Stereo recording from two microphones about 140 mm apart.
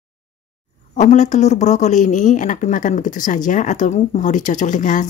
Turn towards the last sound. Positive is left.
turn(degrees=65)  # may be behind; listen again after turning